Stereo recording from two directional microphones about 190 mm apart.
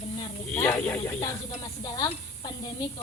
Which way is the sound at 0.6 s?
5° left (ahead or behind).